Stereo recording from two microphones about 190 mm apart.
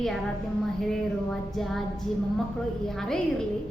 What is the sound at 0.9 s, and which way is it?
Speech, centre (ahead or behind).